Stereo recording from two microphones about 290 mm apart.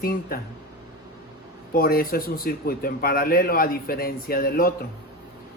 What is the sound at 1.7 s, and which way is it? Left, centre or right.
A man's voice, left.